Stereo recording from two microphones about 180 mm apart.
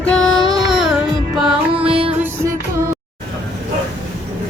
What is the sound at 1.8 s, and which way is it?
Music, 30° right (ahead or behind).